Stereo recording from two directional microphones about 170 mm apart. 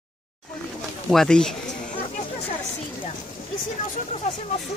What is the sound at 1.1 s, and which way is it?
Speech, 5° left (ahead or behind).